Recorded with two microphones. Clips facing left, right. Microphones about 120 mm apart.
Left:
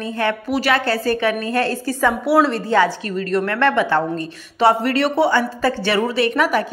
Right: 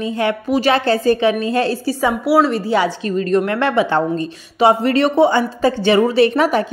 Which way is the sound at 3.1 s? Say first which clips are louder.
Right 4 dB; 25° right (ahead or behind).